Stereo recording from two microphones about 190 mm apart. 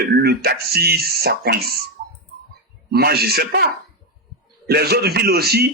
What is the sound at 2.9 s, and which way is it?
A man's voice, 55° right (ahead or behind).